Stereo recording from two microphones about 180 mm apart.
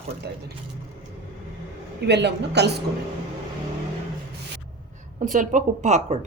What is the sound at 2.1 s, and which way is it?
Speech, 70° right (ahead or behind).